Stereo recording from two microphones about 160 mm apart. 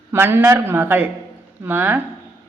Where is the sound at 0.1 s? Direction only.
15° right (ahead or behind).